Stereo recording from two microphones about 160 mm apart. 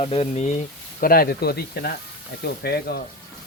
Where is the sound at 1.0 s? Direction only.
65° left (ahead or behind); by 3.0 s 80° left.